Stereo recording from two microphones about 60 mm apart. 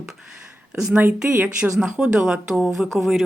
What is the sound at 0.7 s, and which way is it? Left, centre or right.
Speech, right.